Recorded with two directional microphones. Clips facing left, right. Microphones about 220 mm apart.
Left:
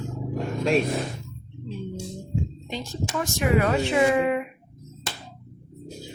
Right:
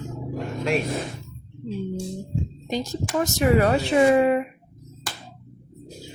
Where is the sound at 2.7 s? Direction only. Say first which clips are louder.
Right 8 dB; 40° right (ahead or behind).